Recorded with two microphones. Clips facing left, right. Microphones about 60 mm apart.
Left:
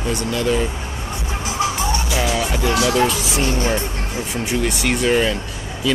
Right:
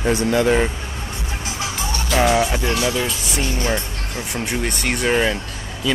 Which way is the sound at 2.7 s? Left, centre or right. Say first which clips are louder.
Left 4 dB; left.